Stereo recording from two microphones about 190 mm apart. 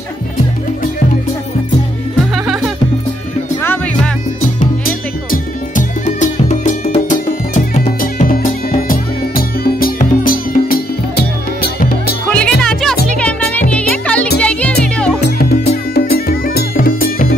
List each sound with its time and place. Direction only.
2.3 s music: centre (ahead or behind)
3.6 s music: 10° left (ahead or behind)
4.6 s music: 45° left (ahead or behind)
12.3 s music: 5° left (ahead or behind)
15.2 s music: 55° left (ahead or behind)